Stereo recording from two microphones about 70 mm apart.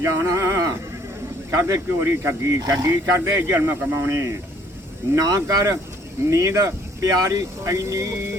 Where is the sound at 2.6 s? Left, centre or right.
Right.